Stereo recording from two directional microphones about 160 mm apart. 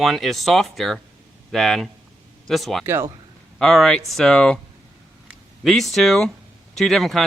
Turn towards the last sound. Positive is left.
turn(degrees=0)  # may be behind; listen again after turning